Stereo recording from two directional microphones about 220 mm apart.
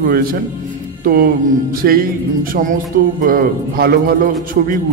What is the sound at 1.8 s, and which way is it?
A man's voice, 40° right (ahead or behind).